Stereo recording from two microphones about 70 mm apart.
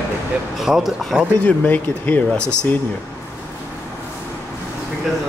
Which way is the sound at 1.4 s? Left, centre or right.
Left.